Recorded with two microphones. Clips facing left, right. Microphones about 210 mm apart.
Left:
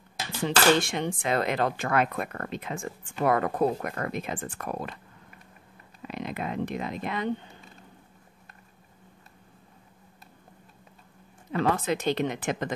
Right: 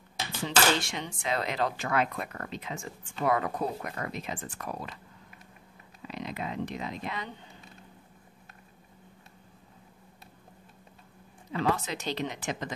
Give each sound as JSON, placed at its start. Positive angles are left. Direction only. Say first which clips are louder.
{"t": 0.7, "sound": "speech", "louder": "left 7 dB", "side_deg": 55}
{"t": 6.0, "sound": "speech", "louder": "left 3 dB", "side_deg": 55}
{"t": 11.5, "sound": "speech", "louder": "left 4 dB", "side_deg": 55}